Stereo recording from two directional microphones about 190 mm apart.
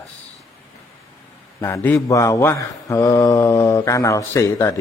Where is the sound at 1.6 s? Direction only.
10° left (ahead or behind).